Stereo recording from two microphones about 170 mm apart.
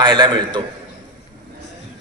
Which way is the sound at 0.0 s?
30° right (ahead or behind).